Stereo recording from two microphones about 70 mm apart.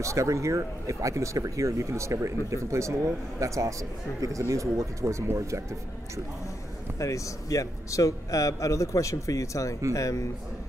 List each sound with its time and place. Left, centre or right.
0.0 s speech: right
7.0 s a man's voice: left